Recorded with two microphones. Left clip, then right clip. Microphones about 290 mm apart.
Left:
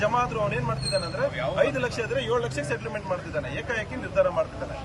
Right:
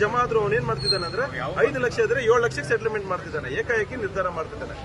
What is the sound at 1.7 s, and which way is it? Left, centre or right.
Speech, centre.